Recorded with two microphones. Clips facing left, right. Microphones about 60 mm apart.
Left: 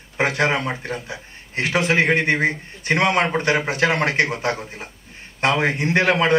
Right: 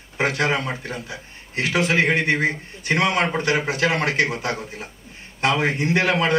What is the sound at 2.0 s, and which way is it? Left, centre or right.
A man's voice, left.